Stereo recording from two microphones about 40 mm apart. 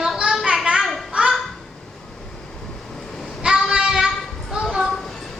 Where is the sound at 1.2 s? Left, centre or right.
Right.